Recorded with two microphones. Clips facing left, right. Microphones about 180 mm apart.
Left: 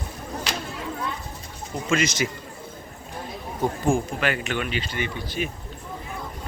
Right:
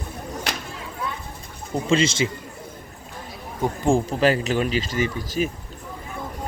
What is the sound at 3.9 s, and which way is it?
Speech, 35° right (ahead or behind).